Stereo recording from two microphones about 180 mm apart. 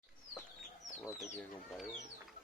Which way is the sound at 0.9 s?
Centre (ahead or behind).